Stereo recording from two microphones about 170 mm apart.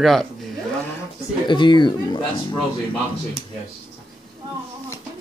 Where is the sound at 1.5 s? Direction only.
30° left (ahead or behind).